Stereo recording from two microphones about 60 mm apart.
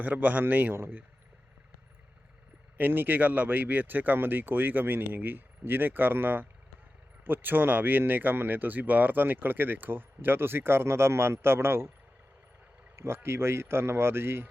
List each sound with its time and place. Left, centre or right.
0.0 s speech: right
2.7 s speech: right
13.0 s speech: right